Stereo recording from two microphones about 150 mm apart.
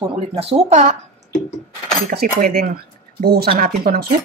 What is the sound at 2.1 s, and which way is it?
Speech, 75° right (ahead or behind).